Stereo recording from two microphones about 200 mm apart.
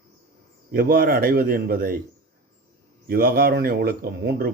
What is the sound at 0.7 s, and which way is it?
Speech, 50° right (ahead or behind).